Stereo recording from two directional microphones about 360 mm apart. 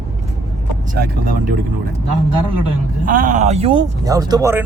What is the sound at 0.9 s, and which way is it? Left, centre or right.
Speech, right.